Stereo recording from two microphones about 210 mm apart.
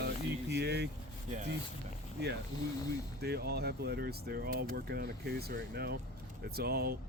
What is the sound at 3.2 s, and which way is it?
Speech, 50° right (ahead or behind).